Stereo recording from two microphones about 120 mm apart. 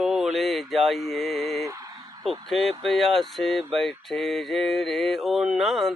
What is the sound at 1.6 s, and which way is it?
Speech, 30° right (ahead or behind).